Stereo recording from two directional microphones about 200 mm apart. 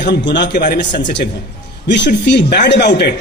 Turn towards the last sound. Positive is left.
turn(degrees=55)  # may be behind; listen again after turning